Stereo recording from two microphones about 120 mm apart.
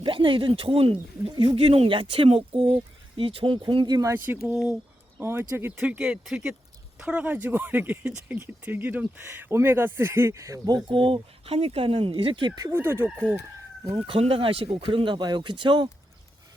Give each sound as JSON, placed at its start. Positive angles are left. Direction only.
{"t": 0.0, "sound": "speech", "side_deg": -45}
{"t": 4.7, "sound": "speech", "side_deg": -15}
{"t": 6.0, "sound": "speech", "side_deg": -5}
{"t": 13.9, "sound": "speech", "side_deg": -50}